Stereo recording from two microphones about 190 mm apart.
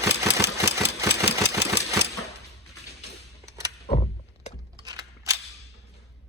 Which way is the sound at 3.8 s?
35° left (ahead or behind).